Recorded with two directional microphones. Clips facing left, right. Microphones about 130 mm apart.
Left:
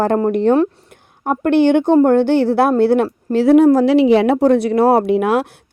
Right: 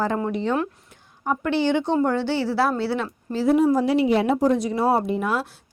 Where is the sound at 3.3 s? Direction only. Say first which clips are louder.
Left 8 dB; 70° left (ahead or behind).